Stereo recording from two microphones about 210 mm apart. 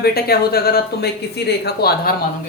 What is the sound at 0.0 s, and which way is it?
Speech, 50° left (ahead or behind).